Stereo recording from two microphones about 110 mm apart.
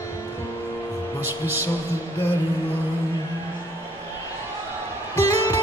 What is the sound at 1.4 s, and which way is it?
Speech, 20° right (ahead or behind).